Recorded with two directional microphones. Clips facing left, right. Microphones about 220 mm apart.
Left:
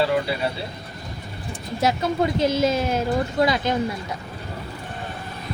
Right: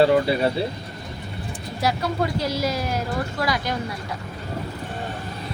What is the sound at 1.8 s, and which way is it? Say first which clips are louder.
Speech: left 2 dB; 20° left (ahead or behind).